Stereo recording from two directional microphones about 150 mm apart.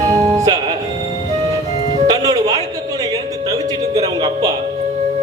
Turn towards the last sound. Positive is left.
turn(degrees=-25)  # may be behind; listen again after turning